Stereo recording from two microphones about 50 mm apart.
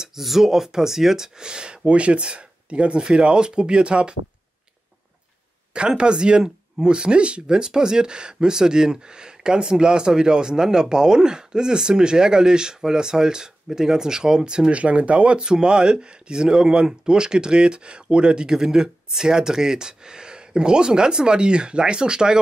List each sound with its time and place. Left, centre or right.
0.0 s speech: centre
5.7 s speech: centre